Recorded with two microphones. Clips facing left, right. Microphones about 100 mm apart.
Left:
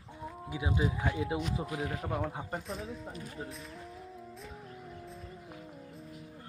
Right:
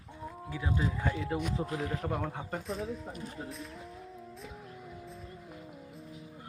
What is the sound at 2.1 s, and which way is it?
Speech, 5° left (ahead or behind).